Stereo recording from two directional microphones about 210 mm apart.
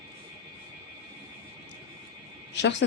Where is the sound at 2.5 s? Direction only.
55° left (ahead or behind).